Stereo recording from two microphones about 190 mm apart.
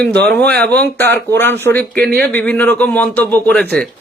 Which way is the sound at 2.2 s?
10° left (ahead or behind).